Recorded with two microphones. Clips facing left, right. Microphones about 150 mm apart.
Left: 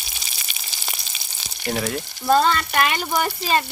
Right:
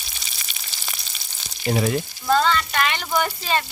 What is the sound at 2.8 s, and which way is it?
Speech, 40° left (ahead or behind).